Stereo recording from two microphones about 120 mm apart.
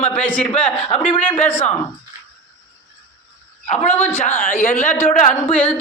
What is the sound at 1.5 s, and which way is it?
Speech, 15° left (ahead or behind).